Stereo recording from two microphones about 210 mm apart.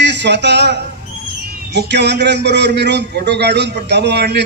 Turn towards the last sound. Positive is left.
turn(degrees=-55)  # may be behind; listen again after turning